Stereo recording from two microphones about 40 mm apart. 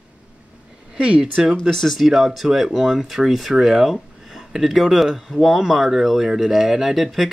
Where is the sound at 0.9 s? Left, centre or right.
Right.